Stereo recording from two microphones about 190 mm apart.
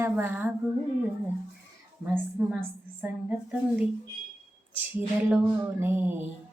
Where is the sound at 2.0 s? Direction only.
10° right (ahead or behind).